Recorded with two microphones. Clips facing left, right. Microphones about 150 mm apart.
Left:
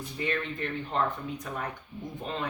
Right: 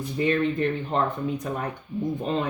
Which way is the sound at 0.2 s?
25° right (ahead or behind).